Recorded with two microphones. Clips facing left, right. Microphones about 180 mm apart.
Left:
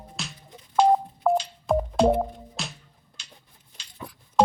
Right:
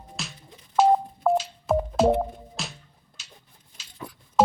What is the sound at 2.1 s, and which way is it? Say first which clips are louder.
Music: even; centre (ahead or behind).